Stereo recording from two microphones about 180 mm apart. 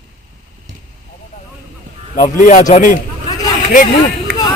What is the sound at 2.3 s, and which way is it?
Speech, 45° left (ahead or behind).